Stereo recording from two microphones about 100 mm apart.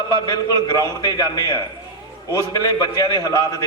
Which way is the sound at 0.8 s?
40° left (ahead or behind).